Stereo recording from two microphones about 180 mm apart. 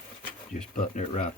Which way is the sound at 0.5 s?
45° left (ahead or behind).